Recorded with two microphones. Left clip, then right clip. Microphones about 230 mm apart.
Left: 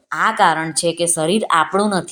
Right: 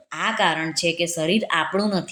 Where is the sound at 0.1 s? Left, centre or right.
Left.